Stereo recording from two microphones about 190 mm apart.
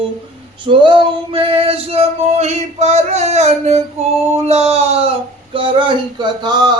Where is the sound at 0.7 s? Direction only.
25° right (ahead or behind).